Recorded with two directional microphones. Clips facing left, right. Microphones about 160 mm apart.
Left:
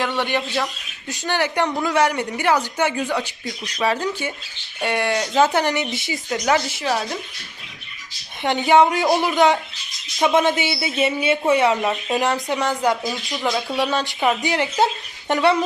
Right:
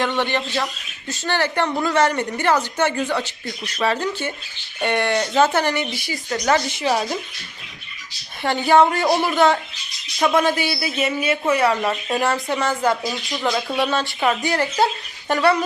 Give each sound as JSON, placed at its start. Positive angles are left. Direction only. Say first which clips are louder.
{"t": 0.0, "sound": "speech", "louder": "right 1 dB", "side_deg": 10}
{"t": 6.4, "sound": "speech", "louder": "right 1 dB", "side_deg": 5}
{"t": 8.4, "sound": "speech", "louder": "even", "side_deg": 20}
{"t": 13.1, "sound": "speech", "louder": "even", "side_deg": 5}